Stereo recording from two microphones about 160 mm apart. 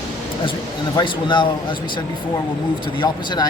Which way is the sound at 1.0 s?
30° left (ahead or behind).